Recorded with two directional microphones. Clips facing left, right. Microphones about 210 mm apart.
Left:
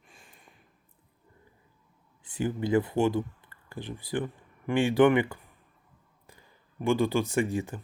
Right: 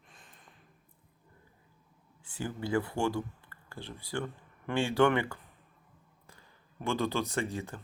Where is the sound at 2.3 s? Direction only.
20° left (ahead or behind).